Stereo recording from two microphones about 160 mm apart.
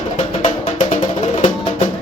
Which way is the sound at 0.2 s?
50° left (ahead or behind).